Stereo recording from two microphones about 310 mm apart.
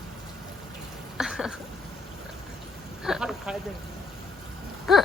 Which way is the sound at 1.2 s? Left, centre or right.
Centre.